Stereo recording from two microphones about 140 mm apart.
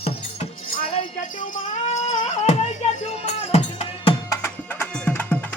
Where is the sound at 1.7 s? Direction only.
55° left (ahead or behind).